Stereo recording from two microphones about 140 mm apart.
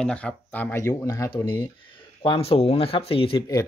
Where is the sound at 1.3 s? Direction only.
30° left (ahead or behind).